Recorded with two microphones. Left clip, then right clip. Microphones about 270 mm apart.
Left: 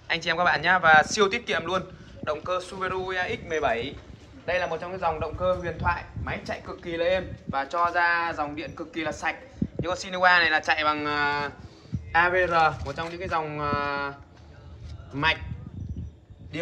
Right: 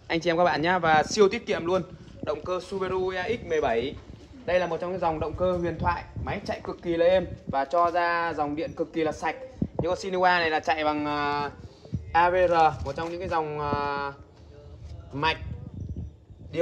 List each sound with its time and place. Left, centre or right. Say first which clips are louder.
0.1 s a man's voice: even; right; by 14.1 s centre